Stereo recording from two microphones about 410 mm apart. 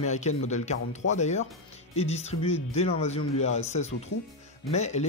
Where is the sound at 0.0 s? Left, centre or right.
Centre.